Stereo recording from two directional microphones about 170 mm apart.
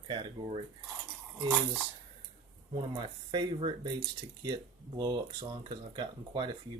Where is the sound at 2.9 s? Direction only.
30° right (ahead or behind).